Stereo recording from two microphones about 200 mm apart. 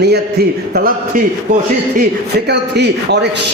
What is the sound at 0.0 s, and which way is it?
Speech, 55° right (ahead or behind).